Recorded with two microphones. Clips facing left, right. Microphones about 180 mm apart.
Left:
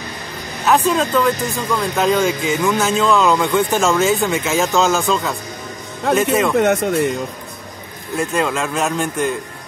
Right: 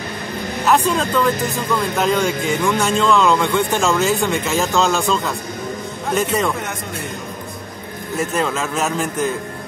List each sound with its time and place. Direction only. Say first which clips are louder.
0.7 s speech: left 2 dB; centre (ahead or behind)
6.6 s speech: left 13 dB; 65° left (ahead or behind)
8.2 s speech: left 2 dB; centre (ahead or behind)